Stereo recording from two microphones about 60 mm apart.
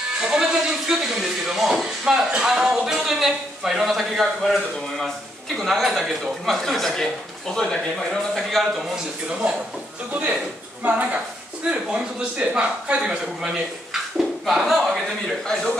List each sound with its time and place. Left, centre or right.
0.2 s speech: centre
10.8 s a woman's voice: right; by 15.5 s centre